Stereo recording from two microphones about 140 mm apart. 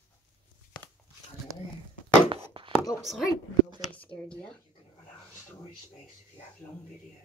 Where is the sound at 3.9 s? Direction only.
10° left (ahead or behind).